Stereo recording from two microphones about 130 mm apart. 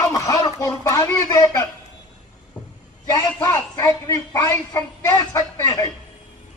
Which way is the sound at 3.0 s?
30° left (ahead or behind).